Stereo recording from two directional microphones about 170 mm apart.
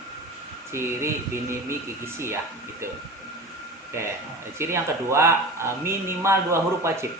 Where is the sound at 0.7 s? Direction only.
15° right (ahead or behind).